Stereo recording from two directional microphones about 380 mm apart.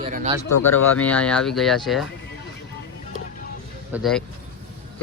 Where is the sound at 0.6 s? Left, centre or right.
Centre.